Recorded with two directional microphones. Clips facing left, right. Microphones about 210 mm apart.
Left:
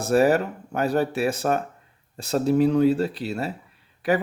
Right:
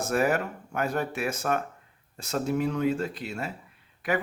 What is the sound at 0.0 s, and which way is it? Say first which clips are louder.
Speech: left 6 dB; 35° left (ahead or behind).